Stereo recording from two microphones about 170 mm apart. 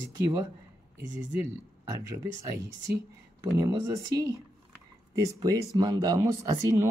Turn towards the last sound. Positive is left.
turn(degrees=-20)  # may be behind; listen again after turning